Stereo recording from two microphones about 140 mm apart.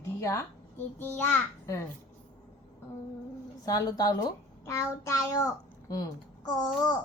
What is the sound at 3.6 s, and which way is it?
A child's voice, 25° left (ahead or behind).